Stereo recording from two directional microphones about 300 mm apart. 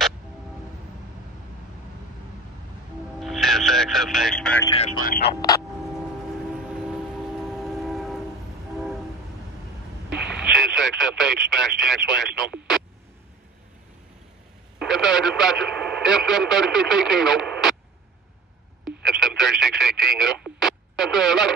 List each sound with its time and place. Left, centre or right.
3.2 s music: centre
4.6 s speech: centre
7.4 s train: centre
10.1 s radio: centre
14.8 s speech: centre
18.9 s radio: centre